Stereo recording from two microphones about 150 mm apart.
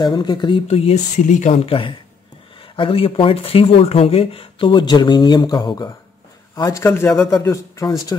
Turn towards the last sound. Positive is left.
turn(degrees=20)  # may be behind; listen again after turning